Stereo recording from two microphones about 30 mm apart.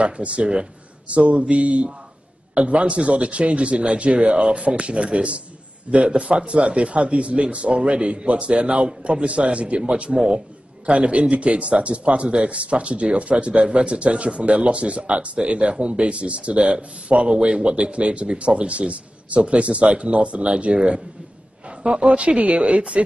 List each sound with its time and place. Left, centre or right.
0.0 s speech: right
1.0 s a man's voice: right